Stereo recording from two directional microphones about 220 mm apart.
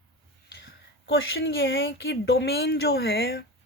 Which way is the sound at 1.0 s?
60° left (ahead or behind).